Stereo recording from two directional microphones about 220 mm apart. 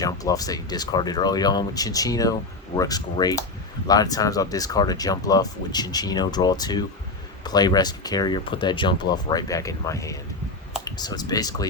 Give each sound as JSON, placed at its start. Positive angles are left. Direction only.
{"t": 0.0, "sound": "speech", "side_deg": 15}